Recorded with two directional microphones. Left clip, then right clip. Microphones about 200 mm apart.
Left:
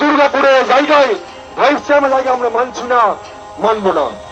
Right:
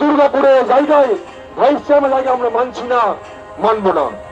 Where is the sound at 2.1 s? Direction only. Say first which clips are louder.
Left 1 dB; 10° left (ahead or behind); by 4.1 s 30° left (ahead or behind).